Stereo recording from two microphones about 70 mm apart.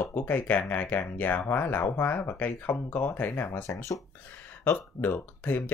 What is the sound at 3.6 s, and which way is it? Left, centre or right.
Speech, left.